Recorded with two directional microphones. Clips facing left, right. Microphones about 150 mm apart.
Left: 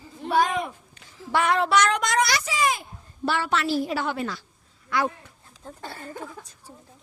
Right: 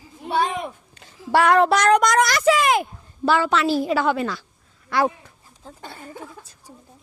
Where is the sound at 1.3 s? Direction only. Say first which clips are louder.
Right 5 dB; 45° right (ahead or behind); by 2.9 s 60° right (ahead or behind).